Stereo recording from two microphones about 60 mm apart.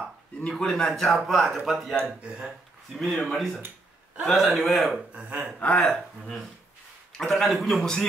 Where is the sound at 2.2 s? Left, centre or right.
Centre.